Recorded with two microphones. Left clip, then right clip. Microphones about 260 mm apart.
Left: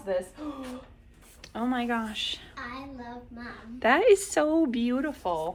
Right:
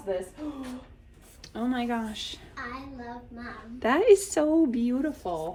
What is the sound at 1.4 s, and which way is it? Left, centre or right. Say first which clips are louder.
Speech: left 1 dB; centre.